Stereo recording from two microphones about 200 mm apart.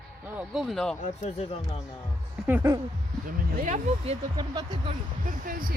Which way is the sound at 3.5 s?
40° right (ahead or behind).